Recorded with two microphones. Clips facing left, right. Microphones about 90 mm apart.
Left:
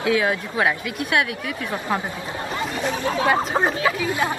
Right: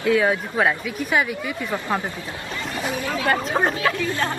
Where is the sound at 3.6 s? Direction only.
5° left (ahead or behind).